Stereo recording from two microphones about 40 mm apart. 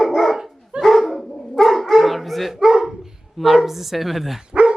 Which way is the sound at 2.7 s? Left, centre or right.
Centre.